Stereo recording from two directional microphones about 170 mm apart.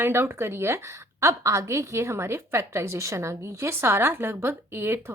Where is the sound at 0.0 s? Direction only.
15° right (ahead or behind).